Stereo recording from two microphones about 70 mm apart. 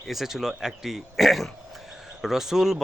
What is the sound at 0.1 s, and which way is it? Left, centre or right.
Speech, centre.